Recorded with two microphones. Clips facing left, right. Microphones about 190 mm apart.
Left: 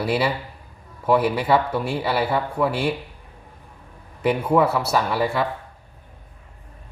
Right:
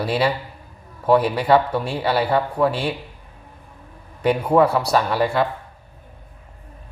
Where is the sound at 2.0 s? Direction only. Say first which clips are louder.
Right 5 dB; 5° left (ahead or behind).